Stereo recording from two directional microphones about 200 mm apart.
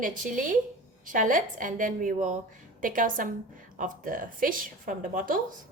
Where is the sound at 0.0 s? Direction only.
40° right (ahead or behind).